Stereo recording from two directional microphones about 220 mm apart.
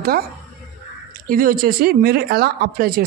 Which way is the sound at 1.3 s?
40° right (ahead or behind).